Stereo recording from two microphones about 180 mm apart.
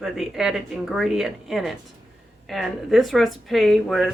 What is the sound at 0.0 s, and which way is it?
A woman's voice, centre (ahead or behind).